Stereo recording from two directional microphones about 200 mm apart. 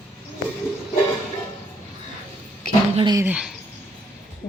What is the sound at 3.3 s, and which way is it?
Speech, 5° right (ahead or behind).